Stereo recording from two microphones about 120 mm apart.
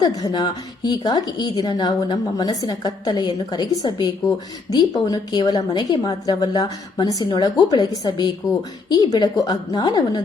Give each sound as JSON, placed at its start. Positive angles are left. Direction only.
{"t": 0.0, "sound": "a woman's voice", "side_deg": 35}